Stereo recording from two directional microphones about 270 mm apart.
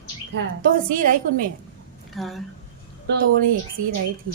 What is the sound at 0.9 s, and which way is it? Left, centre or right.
Speech, right.